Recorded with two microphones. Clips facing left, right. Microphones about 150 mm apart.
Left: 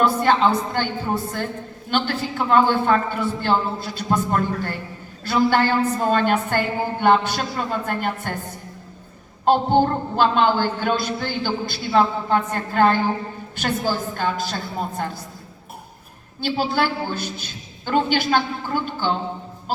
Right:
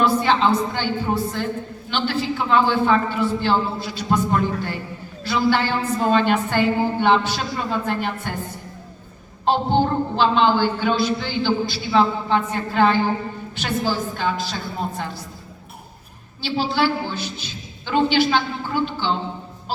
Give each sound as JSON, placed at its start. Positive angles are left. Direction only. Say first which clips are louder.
{"t": 0.2, "sound": "a woman's voice", "louder": "even", "side_deg": 50}
{"t": 1.9, "sound": "a woman's voice", "louder": "even", "side_deg": 50}
{"t": 9.5, "sound": "a woman's voice", "louder": "left 2 dB", "side_deg": 50}
{"t": 16.4, "sound": "a woman's voice", "louder": "even", "side_deg": 50}